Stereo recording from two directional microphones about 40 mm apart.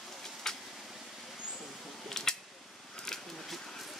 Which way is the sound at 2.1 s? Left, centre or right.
Centre.